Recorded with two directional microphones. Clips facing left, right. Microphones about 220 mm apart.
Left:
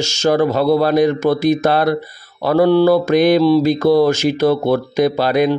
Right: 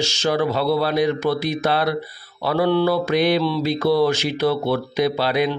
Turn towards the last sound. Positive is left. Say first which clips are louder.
# left 5 dB
turn(degrees=45)  # may be behind; listen again after turning